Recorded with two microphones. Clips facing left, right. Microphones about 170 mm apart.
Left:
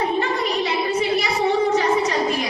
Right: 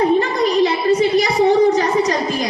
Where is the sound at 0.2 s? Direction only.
35° right (ahead or behind).